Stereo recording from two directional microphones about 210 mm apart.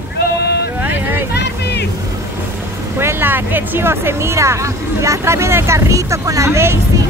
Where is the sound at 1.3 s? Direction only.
50° left (ahead or behind).